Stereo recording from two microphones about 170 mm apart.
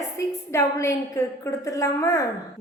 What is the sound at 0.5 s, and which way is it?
A woman's voice, 15° left (ahead or behind).